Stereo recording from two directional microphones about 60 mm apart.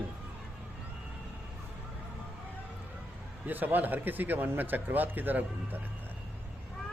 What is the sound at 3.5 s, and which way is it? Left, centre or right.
Speech, right.